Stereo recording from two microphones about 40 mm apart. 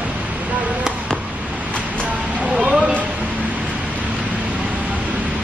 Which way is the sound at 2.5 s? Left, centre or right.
Right.